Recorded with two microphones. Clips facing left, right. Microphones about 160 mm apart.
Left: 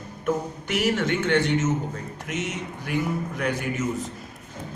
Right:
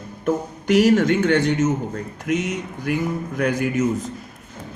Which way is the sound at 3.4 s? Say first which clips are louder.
Right 10 dB; 40° right (ahead or behind).